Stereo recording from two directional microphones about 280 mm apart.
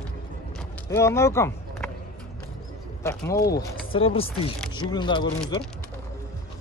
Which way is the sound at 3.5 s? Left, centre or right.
Centre.